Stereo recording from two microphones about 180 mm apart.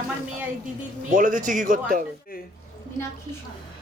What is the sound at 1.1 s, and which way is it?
Speech, 50° right (ahead or behind).